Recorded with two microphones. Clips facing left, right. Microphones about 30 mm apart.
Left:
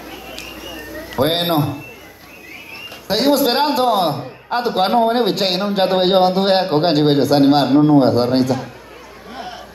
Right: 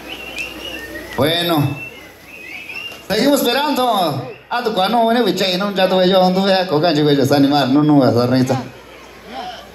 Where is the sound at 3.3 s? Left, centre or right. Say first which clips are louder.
Even; right.